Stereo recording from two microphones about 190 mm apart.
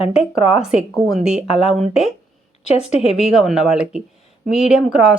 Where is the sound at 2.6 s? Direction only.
35° left (ahead or behind).